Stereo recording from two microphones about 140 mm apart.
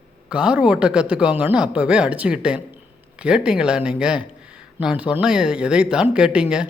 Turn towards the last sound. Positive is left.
turn(degrees=-5)  # may be behind; listen again after turning